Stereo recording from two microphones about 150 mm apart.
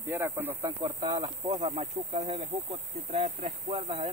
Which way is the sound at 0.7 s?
30° right (ahead or behind).